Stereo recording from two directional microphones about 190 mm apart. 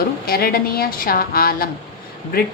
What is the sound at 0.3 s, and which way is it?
A woman's voice, 50° left (ahead or behind).